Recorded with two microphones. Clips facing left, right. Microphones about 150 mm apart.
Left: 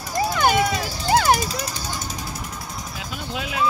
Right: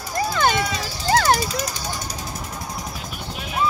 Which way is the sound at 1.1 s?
10° left (ahead or behind).